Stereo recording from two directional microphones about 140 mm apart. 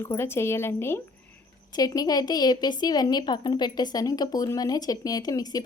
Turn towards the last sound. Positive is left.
turn(degrees=25)  # may be behind; listen again after turning